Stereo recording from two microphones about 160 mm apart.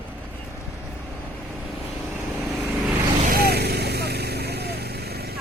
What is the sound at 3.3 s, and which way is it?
Vehicle, 75° right (ahead or behind).